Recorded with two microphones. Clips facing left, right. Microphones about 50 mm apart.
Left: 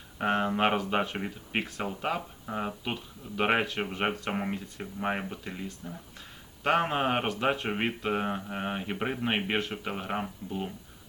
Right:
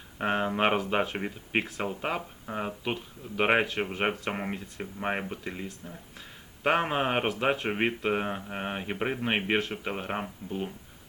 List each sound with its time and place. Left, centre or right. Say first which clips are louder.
0.2 s speech: even; centre
1.9 s speech: even; centre
3.7 s speech: right 1 dB; centre
5.6 s speech: left 1 dB; centre
6.6 s speech: even; centre
9.6 s speech: right 1 dB; centre
9.9 s speech: even; centre